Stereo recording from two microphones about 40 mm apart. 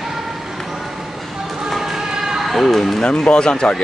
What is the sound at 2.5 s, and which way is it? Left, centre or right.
Speech, centre.